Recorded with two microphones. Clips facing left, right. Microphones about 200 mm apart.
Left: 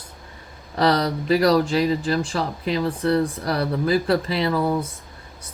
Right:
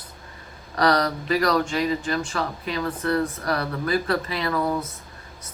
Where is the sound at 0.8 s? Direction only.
30° left (ahead or behind).